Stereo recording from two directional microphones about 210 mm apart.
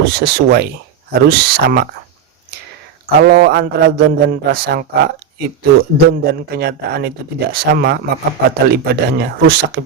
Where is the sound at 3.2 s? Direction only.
50° right (ahead or behind).